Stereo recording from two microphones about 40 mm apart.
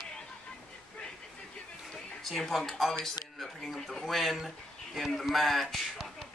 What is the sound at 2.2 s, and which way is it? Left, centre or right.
Speech, centre.